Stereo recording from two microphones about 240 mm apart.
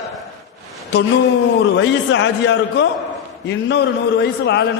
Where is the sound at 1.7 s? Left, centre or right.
Left.